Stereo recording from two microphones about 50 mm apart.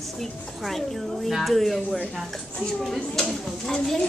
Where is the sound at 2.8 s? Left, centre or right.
Centre.